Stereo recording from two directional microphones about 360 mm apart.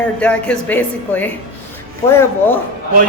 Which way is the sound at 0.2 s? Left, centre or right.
Centre.